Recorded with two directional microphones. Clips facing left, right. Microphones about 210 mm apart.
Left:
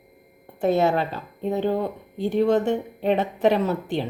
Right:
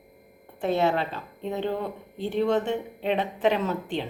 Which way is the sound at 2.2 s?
45° left (ahead or behind).